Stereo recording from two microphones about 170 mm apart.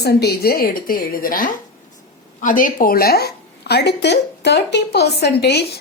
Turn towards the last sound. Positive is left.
turn(degrees=75)  # may be behind; listen again after turning